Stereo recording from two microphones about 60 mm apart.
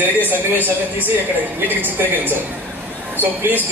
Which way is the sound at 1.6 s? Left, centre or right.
Right.